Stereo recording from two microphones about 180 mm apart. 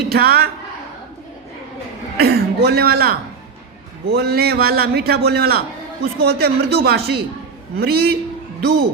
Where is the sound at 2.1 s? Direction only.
60° right (ahead or behind).